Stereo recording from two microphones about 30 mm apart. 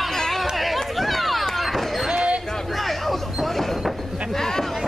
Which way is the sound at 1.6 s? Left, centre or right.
Centre.